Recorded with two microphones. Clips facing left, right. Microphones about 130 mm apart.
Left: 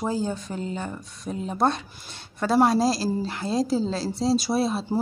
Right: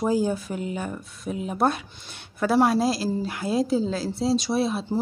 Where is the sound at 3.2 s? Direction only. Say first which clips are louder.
Right 1 dB; 10° right (ahead or behind).